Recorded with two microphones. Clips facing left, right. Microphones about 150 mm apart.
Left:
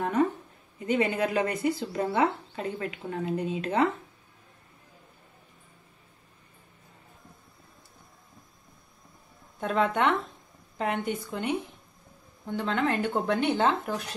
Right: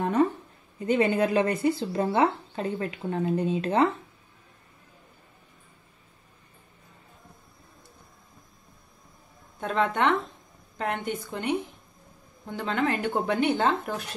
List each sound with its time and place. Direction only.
0.8 s speech: 30° right (ahead or behind)
9.6 s speech: 5° left (ahead or behind)